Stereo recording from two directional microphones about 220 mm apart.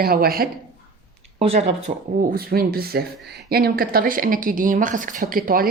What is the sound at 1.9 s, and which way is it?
Speech, 30° right (ahead or behind).